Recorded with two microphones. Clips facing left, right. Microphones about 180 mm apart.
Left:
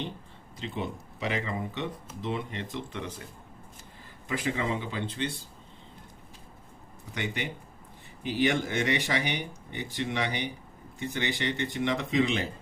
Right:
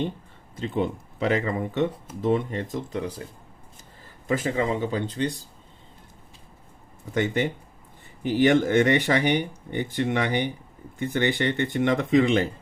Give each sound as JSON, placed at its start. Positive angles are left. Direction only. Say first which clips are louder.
{"t": 0.5, "sound": "speech", "louder": "right 8 dB", "side_deg": -50}
{"t": 4.3, "sound": "speech", "louder": "right 6 dB", "side_deg": -45}
{"t": 7.1, "sound": "speech", "louder": "right 10 dB", "side_deg": -45}